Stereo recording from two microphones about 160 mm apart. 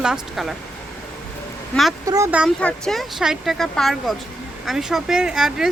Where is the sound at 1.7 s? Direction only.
Centre (ahead or behind).